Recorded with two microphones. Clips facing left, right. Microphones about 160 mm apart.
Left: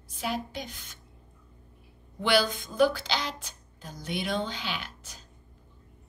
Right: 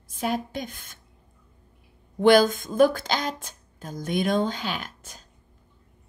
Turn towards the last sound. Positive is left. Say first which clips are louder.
# right 4 dB
turn(degrees=-50)  # may be behind; listen again after turning